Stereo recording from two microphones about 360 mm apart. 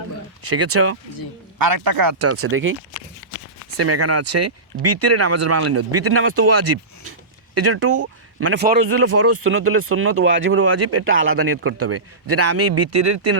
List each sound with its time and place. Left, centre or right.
0.5 s speech: right
1.5 s speech: right
2.1 s speech: right
3.8 s speech: right
7.5 s speech: right
8.9 s speech: right